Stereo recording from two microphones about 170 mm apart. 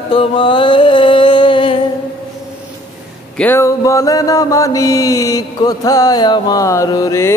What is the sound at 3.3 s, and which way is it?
Mantra, 10° left (ahead or behind).